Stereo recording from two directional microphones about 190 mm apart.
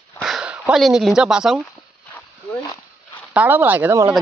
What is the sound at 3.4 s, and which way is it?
Speech, 10° right (ahead or behind).